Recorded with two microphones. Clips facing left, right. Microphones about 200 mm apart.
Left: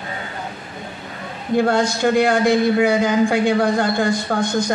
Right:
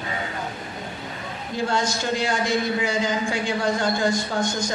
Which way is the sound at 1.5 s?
60° left (ahead or behind).